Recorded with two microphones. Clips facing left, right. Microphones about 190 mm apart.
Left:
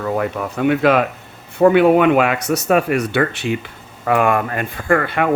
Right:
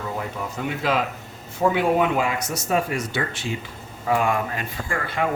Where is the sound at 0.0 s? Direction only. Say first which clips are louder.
Left 9 dB; 65° left (ahead or behind).